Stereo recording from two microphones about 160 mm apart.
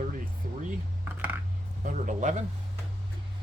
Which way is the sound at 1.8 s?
55° right (ahead or behind).